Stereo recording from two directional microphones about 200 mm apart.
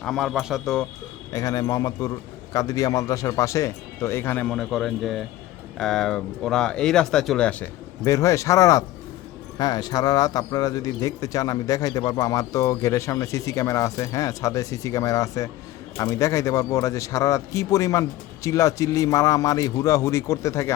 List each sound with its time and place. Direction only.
0.0 s speech: centre (ahead or behind)
1.3 s a man's voice: 15° left (ahead or behind)
8.0 s a man's voice: 15° left (ahead or behind)